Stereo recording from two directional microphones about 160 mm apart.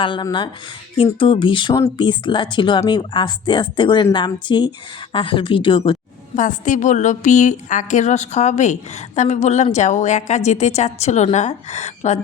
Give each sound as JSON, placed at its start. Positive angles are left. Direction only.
{"t": 0.0, "sound": "speech", "side_deg": 30}
{"t": 6.3, "sound": "a woman's voice", "side_deg": 50}